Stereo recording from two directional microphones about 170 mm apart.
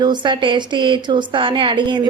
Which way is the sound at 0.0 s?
25° right (ahead or behind).